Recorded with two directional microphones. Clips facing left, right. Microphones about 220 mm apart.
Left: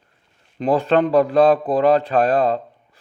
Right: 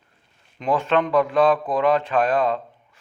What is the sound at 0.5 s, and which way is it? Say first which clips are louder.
A man's voice: left 4 dB; 35° left (ahead or behind).